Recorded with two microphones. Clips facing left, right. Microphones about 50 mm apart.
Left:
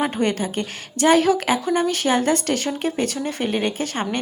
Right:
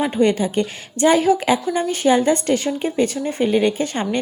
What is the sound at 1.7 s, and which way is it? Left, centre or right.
Speech, left.